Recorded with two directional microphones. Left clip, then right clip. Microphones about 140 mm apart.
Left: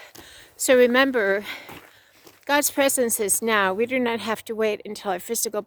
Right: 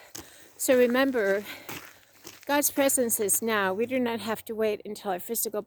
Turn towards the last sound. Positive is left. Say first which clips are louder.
# left 5 dB
turn(degrees=20)  # may be behind; listen again after turning